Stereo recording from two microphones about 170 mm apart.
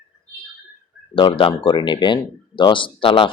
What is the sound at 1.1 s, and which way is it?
Speech, 30° left (ahead or behind).